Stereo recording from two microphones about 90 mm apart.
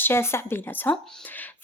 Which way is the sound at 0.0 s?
25° left (ahead or behind).